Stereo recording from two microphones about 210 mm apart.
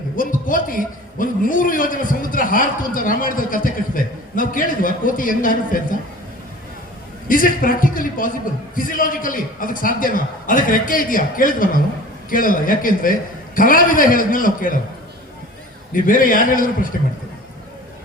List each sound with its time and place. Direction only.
0.2 s a man's voice: 40° left (ahead or behind)
7.3 s a man's voice: 40° left (ahead or behind)
15.9 s a man's voice: 40° left (ahead or behind)